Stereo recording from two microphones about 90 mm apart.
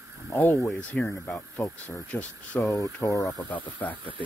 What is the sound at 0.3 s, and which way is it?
Speech, 20° left (ahead or behind).